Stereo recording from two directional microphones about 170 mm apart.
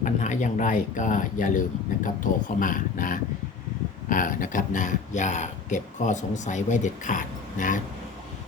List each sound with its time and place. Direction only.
0.0 s speech: 45° left (ahead or behind)